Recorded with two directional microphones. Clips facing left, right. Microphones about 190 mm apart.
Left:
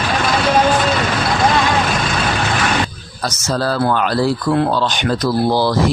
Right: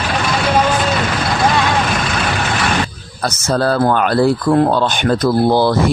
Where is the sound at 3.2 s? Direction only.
55° right (ahead or behind).